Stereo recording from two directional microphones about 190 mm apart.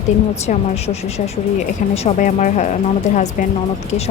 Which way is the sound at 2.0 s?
40° left (ahead or behind).